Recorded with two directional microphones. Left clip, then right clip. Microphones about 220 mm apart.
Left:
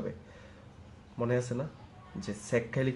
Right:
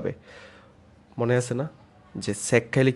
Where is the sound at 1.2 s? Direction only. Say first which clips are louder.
Right 7 dB; 45° right (ahead or behind).